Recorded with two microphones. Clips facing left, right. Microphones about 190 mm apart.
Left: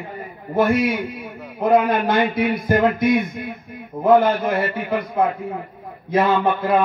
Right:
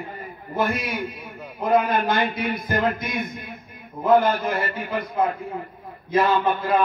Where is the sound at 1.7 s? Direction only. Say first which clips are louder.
Left 3 dB; 60° left (ahead or behind).